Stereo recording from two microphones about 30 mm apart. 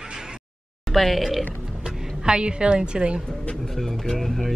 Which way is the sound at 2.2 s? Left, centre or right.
Right.